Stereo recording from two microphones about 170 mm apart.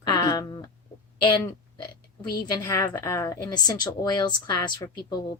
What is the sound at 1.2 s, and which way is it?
A woman's voice, 30° left (ahead or behind).